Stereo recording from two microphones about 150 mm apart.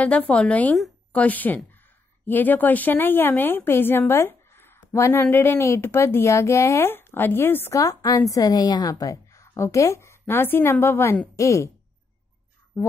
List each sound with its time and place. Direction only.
0.0 s speech: 10° left (ahead or behind)
12.7 s speech: 15° left (ahead or behind)